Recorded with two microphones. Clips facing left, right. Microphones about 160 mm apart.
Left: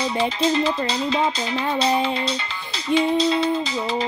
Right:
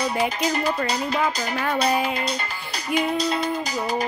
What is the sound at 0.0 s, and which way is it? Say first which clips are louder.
Music: left 2 dB; 25° left (ahead or behind).